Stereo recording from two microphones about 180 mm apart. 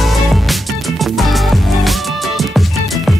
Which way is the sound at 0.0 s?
Centre (ahead or behind).